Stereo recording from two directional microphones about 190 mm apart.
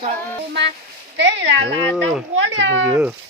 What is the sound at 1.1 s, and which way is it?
Speech, 65° right (ahead or behind).